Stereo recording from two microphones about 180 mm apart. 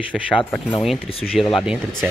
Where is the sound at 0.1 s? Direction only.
5° left (ahead or behind).